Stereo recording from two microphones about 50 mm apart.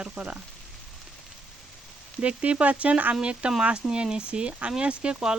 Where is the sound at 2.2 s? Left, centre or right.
Right.